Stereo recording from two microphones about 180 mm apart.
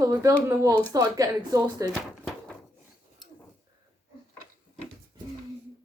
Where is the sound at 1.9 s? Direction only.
Centre (ahead or behind).